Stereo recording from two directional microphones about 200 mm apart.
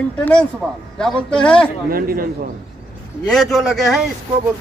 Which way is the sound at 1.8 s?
45° right (ahead or behind).